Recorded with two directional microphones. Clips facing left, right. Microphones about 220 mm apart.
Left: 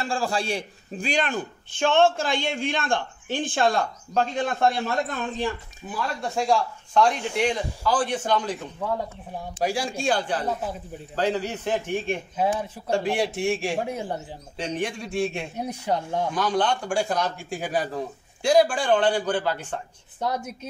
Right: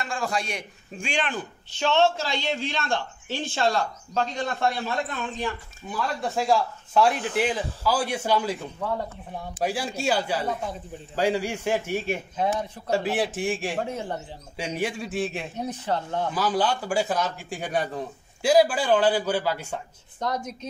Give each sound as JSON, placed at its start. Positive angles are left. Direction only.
{"t": 0.0, "sound": "a man's voice", "side_deg": 30}
{"t": 5.9, "sound": "a man's voice", "side_deg": 0}
{"t": 9.6, "sound": "a man's voice", "side_deg": -5}
{"t": 12.4, "sound": "speech", "side_deg": 5}
{"t": 12.9, "sound": "a man's voice", "side_deg": -5}
{"t": 13.7, "sound": "speech", "side_deg": 10}
{"t": 14.6, "sound": "a man's voice", "side_deg": -10}
{"t": 15.5, "sound": "speech", "side_deg": 10}
{"t": 16.3, "sound": "a man's voice", "side_deg": -5}
{"t": 20.2, "sound": "speech", "side_deg": 10}